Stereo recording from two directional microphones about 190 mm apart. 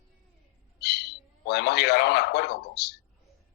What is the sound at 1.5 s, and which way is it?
Speech, 60° left (ahead or behind).